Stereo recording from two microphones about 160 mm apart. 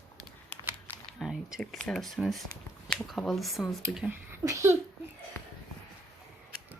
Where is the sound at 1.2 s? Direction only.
Centre (ahead or behind).